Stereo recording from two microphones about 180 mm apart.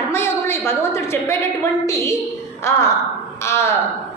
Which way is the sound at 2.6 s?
15° left (ahead or behind).